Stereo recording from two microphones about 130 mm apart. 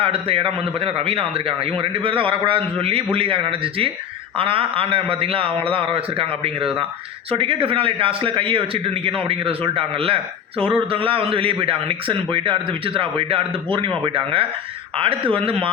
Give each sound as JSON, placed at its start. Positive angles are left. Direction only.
{"t": 0.0, "sound": "a man's voice", "side_deg": -45}